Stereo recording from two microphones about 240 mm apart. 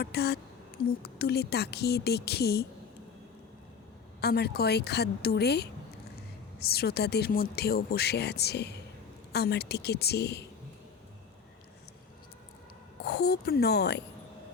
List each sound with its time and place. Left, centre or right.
0.0 s a woman's voice: left
4.2 s a woman's voice: left
13.1 s a woman's voice: left